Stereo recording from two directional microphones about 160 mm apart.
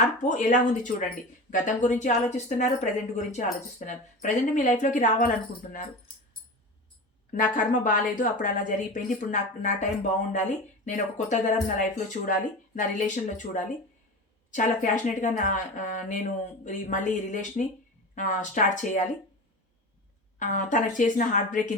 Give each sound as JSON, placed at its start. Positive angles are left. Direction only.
{"t": 0.2, "sound": "speech", "side_deg": 55}
{"t": 7.3, "sound": "a woman's voice", "side_deg": 55}
{"t": 20.4, "sound": "speech", "side_deg": 55}